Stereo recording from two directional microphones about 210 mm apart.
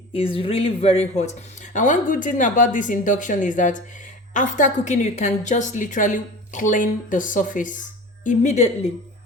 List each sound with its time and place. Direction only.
0.1 s speech: 25° left (ahead or behind)